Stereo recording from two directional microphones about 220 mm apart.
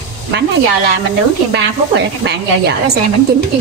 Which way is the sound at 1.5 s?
50° right (ahead or behind).